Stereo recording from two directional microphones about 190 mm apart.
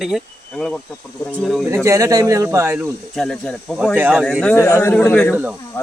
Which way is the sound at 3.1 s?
Centre (ahead or behind).